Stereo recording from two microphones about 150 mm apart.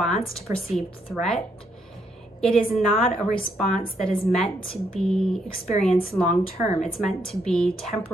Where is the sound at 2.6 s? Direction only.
35° left (ahead or behind).